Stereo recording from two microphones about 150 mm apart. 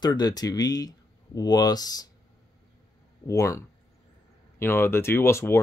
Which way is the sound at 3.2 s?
20° left (ahead or behind).